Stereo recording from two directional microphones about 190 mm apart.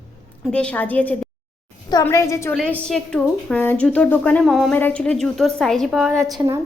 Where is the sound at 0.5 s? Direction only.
5° left (ahead or behind).